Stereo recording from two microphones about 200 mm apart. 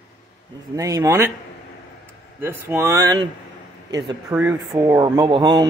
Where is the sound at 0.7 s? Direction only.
15° right (ahead or behind).